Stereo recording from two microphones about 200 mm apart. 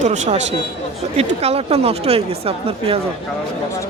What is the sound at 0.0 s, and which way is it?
Speech, 35° right (ahead or behind).